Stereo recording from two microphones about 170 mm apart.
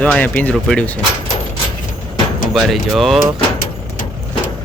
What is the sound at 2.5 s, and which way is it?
Speech, centre (ahead or behind).